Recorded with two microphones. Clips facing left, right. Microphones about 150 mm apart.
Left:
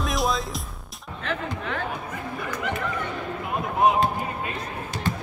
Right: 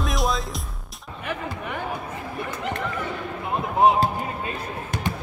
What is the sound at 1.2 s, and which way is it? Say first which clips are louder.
Music: left 1 dB; 10° right (ahead or behind).